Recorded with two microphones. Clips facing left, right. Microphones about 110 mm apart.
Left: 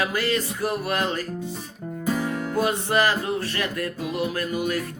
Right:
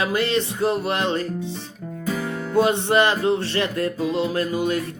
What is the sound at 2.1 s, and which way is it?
Music, 10° left (ahead or behind).